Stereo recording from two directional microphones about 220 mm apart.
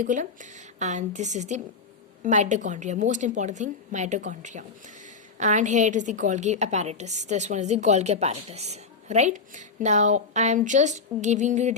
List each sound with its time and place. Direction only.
0.0 s a woman's voice: 35° right (ahead or behind)